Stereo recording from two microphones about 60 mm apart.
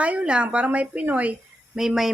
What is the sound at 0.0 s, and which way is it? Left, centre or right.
A woman's voice, right.